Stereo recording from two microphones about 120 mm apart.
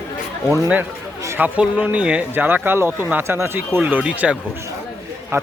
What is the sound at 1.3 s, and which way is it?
A man's voice, 15° right (ahead or behind).